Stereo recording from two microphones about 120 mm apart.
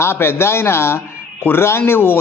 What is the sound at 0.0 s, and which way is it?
A man's voice, 20° left (ahead or behind).